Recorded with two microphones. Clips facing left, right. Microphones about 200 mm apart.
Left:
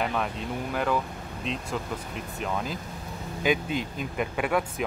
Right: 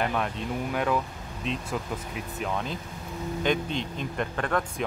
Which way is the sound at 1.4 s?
Centre (ahead or behind).